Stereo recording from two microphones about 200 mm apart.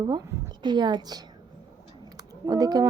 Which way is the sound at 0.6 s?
20° right (ahead or behind).